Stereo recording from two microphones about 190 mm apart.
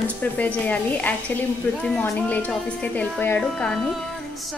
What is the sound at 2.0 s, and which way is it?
A woman's voice, 10° left (ahead or behind).